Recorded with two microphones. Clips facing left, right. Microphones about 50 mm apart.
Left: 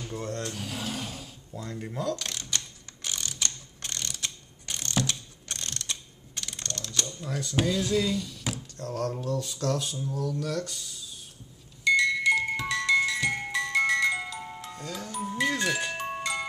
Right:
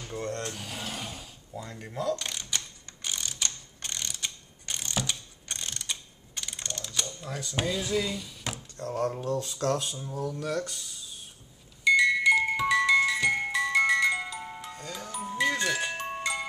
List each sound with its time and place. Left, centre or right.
0.0 s a sound: centre
9.3 s speech: right
9.8 s speech: centre
11.8 s music: centre